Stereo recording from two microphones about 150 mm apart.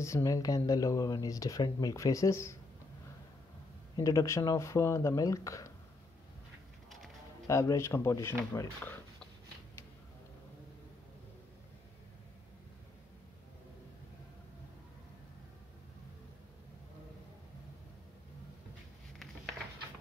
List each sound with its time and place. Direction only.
0.0 s speech: 20° left (ahead or behind)
3.9 s speech: 20° left (ahead or behind)
7.4 s speech: 20° left (ahead or behind)